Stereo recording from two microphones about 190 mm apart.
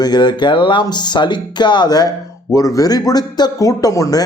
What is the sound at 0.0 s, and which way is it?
A man's voice, 25° left (ahead or behind).